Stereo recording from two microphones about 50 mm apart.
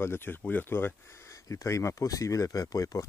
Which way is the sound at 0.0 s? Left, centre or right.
Left.